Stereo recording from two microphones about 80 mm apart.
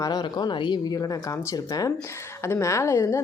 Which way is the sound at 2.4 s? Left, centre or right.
Left.